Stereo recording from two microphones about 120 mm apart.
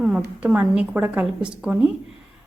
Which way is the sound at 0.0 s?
5° right (ahead or behind).